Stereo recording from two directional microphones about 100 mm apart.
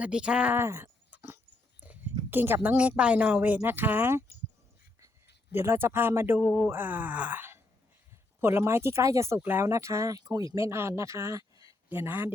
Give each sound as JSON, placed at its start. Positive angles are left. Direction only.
{"t": 0.0, "sound": "speech", "side_deg": -10}
{"t": 0.5, "sound": "a sound", "side_deg": -25}
{"t": 2.6, "sound": "speech", "side_deg": -15}
{"t": 5.5, "sound": "speech", "side_deg": -25}
{"t": 11.9, "sound": "speech", "side_deg": -20}